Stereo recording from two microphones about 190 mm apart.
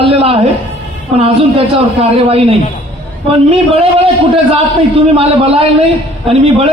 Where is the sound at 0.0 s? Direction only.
30° right (ahead or behind).